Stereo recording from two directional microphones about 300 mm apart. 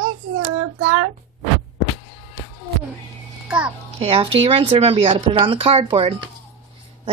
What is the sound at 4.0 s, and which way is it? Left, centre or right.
Speech, centre.